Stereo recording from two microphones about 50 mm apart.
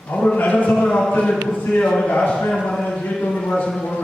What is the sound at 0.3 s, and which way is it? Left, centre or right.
Speech, left.